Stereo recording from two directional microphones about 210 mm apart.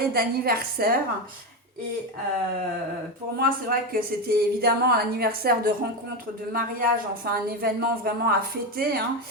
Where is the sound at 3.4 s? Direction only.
45° right (ahead or behind).